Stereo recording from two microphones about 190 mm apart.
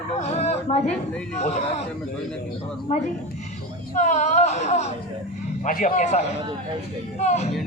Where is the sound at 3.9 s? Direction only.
40° left (ahead or behind).